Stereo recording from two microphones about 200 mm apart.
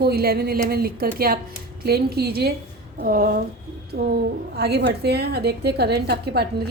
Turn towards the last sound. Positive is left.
turn(degrees=-55)  # may be behind; listen again after turning